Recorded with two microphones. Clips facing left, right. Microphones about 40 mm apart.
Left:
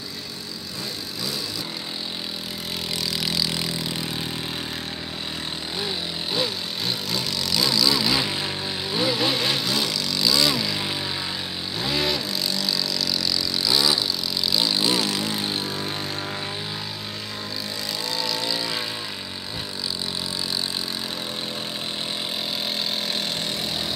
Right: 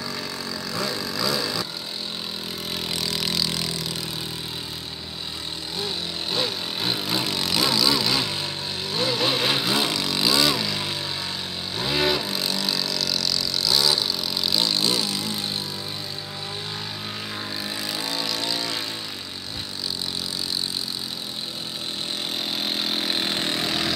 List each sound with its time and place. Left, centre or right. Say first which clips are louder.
0.7 s vehicle: right 6 dB; right
2.9 s vehicle: even; centre
6.8 s vehicle: right 3 dB; right
7.9 s vehicle: left 1 dB; centre
9.5 s vehicle: right 2 dB; right
10.5 s vehicle: even; centre
11.8 s vehicle: right 2 dB; centre
12.3 s vehicle: even; right
12.5 s vehicle: even; centre
12.9 s vehicle: left 1 dB; centre
15.0 s vehicle: left 2 dB; left
18.3 s vehicle: left 1 dB; centre
23.0 s vehicle: right 2 dB; right
23.5 s vehicle: right 3 dB; right